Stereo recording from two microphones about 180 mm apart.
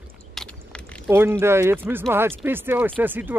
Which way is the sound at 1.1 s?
15° right (ahead or behind).